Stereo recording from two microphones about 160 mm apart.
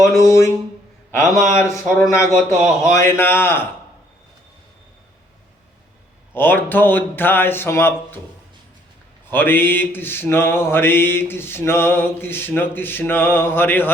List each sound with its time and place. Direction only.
0.2 s mantra: 20° left (ahead or behind)
6.3 s mantra: 10° left (ahead or behind)
9.3 s mantra: 15° left (ahead or behind)